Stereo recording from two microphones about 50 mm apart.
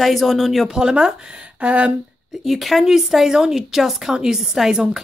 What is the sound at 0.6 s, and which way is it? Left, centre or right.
A woman's voice, centre.